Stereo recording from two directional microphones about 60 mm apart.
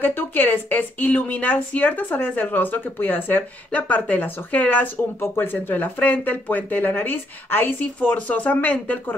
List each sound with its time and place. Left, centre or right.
0.0 s a woman's voice: left
5.2 s a woman's voice: left
8.0 s speech: left